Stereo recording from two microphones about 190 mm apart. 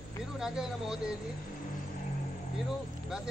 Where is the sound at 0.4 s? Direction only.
5° right (ahead or behind).